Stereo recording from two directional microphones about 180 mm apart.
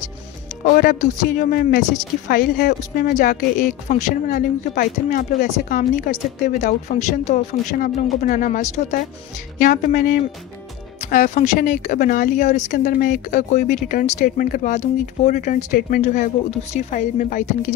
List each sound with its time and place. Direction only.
0.7 s a woman's voice: 50° left (ahead or behind)
9.6 s a woman's voice: 50° left (ahead or behind)